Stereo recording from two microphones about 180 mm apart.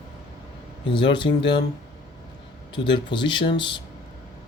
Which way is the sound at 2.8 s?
25° left (ahead or behind).